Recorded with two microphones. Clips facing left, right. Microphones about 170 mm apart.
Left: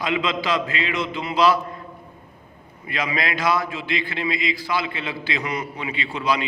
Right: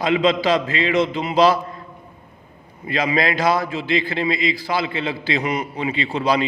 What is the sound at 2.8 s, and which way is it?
A man's voice, 30° right (ahead or behind).